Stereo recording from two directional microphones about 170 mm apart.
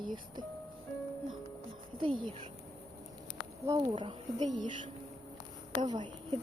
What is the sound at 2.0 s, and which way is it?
Speech, 30° right (ahead or behind).